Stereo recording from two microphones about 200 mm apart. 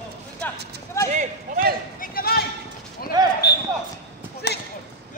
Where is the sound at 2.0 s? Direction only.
50° left (ahead or behind).